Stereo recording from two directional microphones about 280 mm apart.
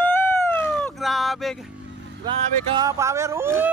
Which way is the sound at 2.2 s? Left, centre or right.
Centre.